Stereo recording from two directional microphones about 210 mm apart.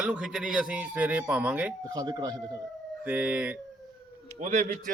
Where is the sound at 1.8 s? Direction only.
20° right (ahead or behind).